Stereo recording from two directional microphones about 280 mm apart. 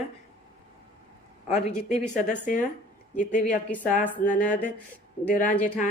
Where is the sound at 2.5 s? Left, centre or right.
Left.